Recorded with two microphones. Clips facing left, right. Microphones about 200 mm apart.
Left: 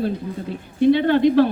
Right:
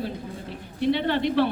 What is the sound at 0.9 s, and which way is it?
Speech, 50° left (ahead or behind).